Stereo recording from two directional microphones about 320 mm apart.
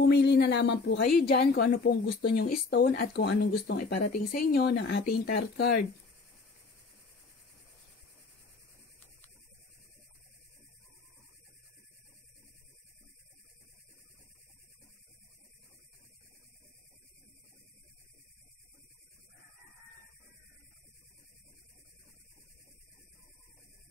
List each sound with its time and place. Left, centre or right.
0.0 s a woman's voice: left